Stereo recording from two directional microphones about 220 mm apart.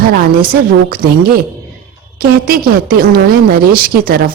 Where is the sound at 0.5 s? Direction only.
40° right (ahead or behind).